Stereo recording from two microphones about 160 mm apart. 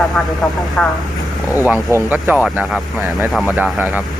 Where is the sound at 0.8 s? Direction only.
5° left (ahead or behind).